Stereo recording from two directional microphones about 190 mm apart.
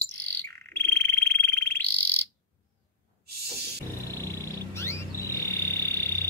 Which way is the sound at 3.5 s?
55° right (ahead or behind).